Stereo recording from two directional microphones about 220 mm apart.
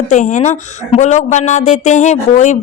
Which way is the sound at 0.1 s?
35° left (ahead or behind).